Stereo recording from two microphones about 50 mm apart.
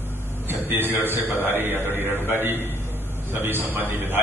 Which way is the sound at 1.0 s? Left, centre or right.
Right.